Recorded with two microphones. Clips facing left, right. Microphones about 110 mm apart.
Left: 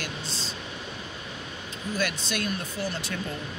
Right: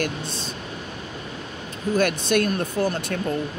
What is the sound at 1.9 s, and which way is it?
Speech, 50° right (ahead or behind).